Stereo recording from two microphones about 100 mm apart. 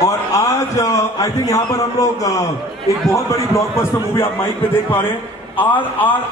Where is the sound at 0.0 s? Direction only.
30° left (ahead or behind).